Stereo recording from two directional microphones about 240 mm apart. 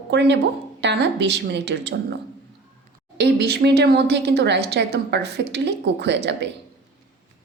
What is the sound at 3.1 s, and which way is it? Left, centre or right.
A woman's voice, right.